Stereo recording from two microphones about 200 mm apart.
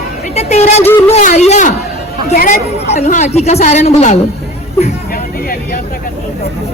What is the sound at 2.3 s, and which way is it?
Speech, 45° left (ahead or behind).